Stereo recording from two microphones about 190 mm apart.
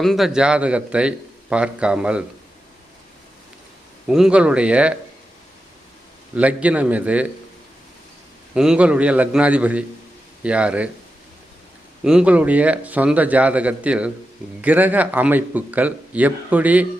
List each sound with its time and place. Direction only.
0.0 s a man's voice: centre (ahead or behind)
4.0 s a man's voice: centre (ahead or behind)
6.3 s speech: 5° right (ahead or behind)
8.5 s speech: 5° right (ahead or behind)
12.0 s speech: 5° right (ahead or behind)